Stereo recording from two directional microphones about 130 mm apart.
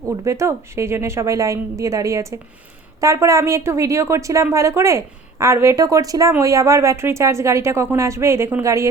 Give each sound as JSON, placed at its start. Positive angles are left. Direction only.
{"t": 0.3, "sound": "speech", "side_deg": -20}